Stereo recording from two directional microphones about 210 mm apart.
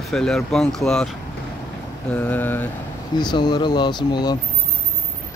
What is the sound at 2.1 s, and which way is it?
Speech, 10° left (ahead or behind).